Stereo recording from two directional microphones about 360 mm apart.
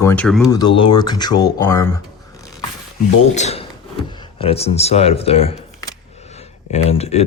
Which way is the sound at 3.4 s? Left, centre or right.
Centre.